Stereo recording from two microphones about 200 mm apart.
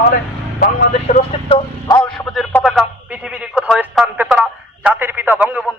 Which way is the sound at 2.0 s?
5° left (ahead or behind).